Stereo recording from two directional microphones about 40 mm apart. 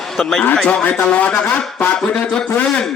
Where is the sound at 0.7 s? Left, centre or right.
Left.